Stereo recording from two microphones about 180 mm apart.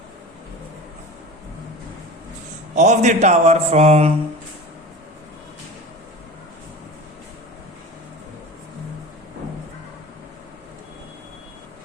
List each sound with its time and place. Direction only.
2.7 s a man's voice: 40° right (ahead or behind)